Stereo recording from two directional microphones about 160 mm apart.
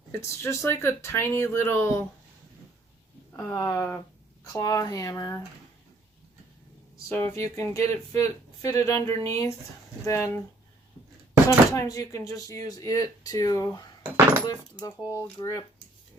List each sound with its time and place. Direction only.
0.1 s speech: 15° left (ahead or behind)
3.3 s speech: 20° left (ahead or behind)
7.1 s speech: 15° left (ahead or behind)
11.4 s speech: 20° left (ahead or behind)